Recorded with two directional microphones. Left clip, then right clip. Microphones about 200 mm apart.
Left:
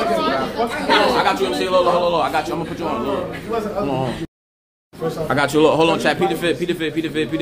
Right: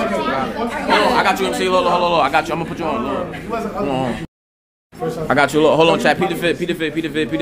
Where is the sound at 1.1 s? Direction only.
60° right (ahead or behind); by 2.6 s 45° right (ahead or behind).